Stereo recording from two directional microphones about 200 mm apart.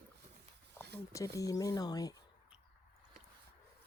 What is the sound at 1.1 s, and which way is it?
Speech, 15° left (ahead or behind).